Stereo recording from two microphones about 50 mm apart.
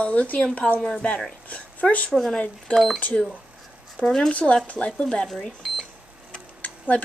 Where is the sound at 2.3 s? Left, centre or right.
Left.